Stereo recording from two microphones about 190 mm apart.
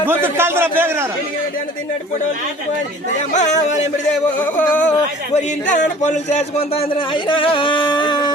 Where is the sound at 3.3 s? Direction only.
40° left (ahead or behind).